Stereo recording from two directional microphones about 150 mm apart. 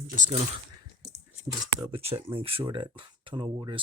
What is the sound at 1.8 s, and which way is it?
Speech, 40° right (ahead or behind).